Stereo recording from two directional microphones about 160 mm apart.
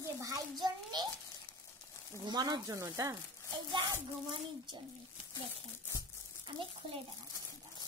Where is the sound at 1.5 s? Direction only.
15° left (ahead or behind).